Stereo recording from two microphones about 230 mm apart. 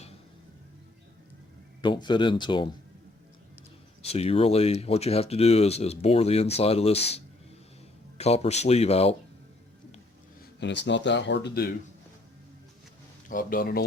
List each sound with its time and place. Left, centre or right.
1.8 s speech: centre
4.0 s speech: left
8.2 s speech: left
10.6 s speech: left
13.2 s speech: left